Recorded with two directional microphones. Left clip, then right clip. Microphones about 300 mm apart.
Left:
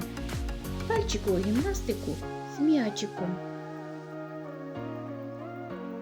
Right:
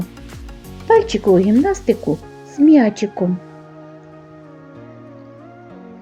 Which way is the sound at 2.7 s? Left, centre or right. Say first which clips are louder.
Right 14 dB; left.